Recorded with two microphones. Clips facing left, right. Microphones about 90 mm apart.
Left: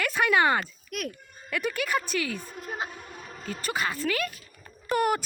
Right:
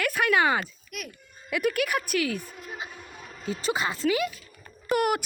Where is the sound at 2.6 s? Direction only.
40° left (ahead or behind).